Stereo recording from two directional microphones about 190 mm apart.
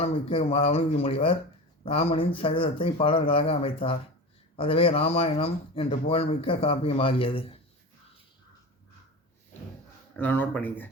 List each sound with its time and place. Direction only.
0.0 s speech: 30° left (ahead or behind)
10.2 s speech: 10° left (ahead or behind)